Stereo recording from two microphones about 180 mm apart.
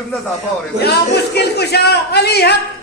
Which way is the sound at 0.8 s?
65° left (ahead or behind).